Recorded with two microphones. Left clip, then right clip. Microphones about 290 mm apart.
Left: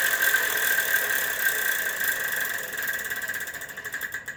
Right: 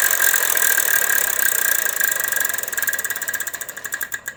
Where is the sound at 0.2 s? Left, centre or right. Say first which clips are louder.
Right 3 dB; right.